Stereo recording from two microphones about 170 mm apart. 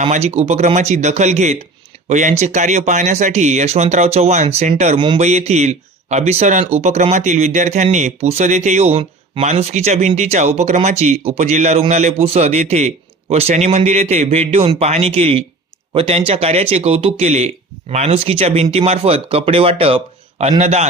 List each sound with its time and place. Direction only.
0.0 s speech: 40° right (ahead or behind)
4.9 s speech: 30° right (ahead or behind)
5.2 s speech: 40° right (ahead or behind)